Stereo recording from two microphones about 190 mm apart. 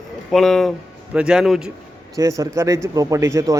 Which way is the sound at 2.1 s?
15° right (ahead or behind).